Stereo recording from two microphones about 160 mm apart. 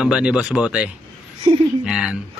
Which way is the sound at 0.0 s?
5° right (ahead or behind).